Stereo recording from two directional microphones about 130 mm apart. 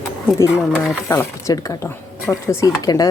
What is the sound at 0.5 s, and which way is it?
Speech, centre (ahead or behind).